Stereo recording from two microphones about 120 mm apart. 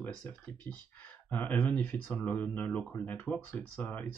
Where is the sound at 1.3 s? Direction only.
15° left (ahead or behind).